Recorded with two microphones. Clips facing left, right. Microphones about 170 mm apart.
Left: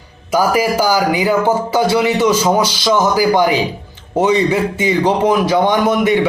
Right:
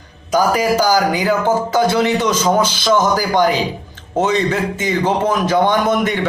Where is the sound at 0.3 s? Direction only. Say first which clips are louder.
Left 1 dB; 10° left (ahead or behind).